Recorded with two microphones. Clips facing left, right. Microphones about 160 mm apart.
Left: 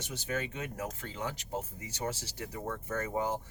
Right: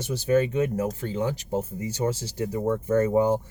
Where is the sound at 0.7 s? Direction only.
30° right (ahead or behind).